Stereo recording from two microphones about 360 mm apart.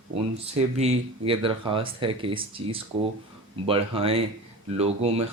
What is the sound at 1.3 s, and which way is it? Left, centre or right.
Speech, centre.